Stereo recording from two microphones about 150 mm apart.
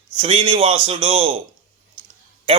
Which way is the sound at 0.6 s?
35° right (ahead or behind).